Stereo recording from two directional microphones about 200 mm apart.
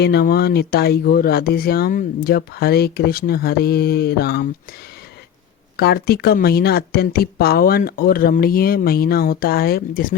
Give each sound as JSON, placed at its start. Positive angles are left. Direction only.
{"t": 0.0, "sound": "speech", "side_deg": 55}
{"t": 5.7, "sound": "speech", "side_deg": 50}